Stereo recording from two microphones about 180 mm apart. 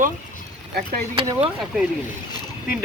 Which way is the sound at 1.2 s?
30° right (ahead or behind).